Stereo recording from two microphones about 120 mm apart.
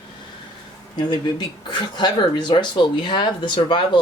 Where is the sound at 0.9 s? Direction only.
40° left (ahead or behind).